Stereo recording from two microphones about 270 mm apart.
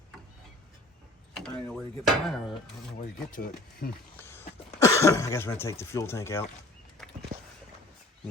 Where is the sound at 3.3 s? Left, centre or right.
Left.